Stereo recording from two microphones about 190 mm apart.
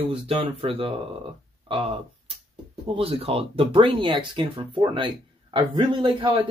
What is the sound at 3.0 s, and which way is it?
Speech, 30° right (ahead or behind).